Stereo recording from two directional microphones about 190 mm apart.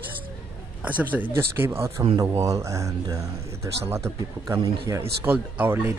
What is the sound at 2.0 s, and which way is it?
Speech, 25° right (ahead or behind).